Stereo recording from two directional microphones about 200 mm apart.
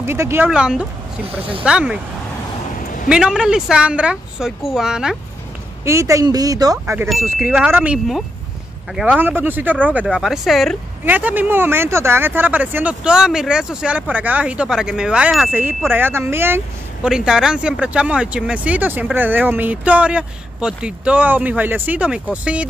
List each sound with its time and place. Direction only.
0.0 s a woman's voice: 10° right (ahead or behind)
3.1 s a woman's voice: 5° right (ahead or behind)
5.9 s speech: 15° right (ahead or behind)